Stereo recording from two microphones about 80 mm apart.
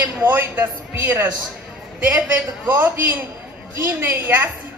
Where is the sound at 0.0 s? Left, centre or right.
Right.